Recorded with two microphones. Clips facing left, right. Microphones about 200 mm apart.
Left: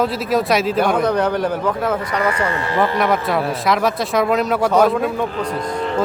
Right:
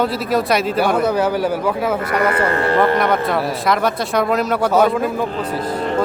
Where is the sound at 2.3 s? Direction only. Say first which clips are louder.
Right 4 dB; 60° right (ahead or behind).